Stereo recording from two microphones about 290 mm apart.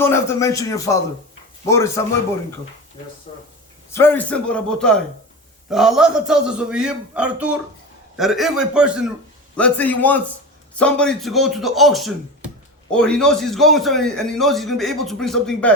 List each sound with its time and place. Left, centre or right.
0.0 s speech: centre
3.3 s speech: centre
3.9 s a man's voice: centre